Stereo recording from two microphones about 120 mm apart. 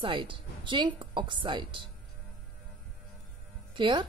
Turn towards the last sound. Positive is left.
turn(degrees=-40)  # may be behind; listen again after turning